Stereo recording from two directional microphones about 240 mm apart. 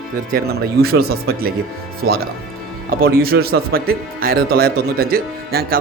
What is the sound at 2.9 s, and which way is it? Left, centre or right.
Speech, right.